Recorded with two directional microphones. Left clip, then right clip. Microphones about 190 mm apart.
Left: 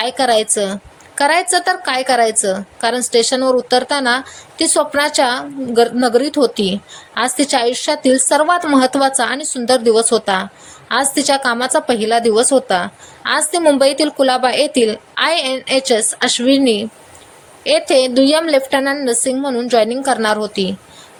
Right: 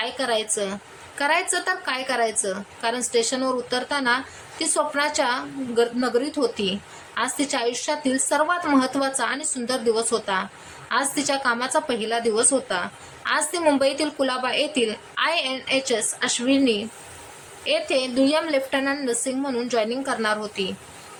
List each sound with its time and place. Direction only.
0.0 s a woman's voice: 30° left (ahead or behind)